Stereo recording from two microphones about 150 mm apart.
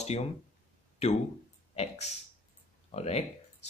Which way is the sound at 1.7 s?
45° left (ahead or behind).